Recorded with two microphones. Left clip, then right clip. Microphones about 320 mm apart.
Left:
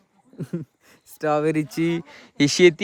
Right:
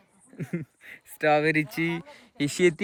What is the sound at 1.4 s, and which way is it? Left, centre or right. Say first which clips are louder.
Speech: left 2 dB; centre.